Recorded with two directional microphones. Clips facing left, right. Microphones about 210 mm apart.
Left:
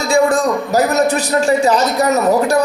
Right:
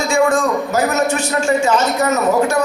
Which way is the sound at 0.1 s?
35° left (ahead or behind).